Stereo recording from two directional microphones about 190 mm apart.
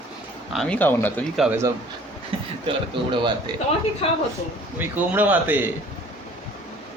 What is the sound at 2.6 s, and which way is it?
Speech, 25° right (ahead or behind).